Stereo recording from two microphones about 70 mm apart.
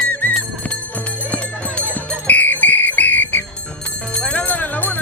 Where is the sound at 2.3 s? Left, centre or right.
Left.